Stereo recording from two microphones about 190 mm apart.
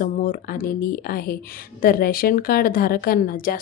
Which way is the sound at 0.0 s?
50° left (ahead or behind).